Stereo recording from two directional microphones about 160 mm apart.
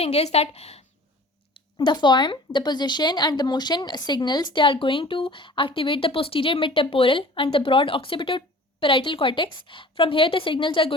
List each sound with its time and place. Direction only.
0.0 s speech: 40° left (ahead or behind)
1.5 s speech: 30° left (ahead or behind)